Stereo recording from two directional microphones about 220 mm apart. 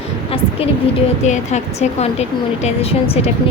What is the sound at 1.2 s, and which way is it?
Speech, 30° left (ahead or behind).